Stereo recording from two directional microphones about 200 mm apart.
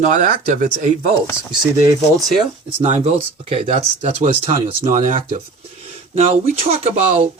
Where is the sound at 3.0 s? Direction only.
30° right (ahead or behind).